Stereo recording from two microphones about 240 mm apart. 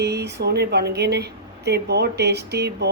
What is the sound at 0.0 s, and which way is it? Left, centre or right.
A woman's voice, right.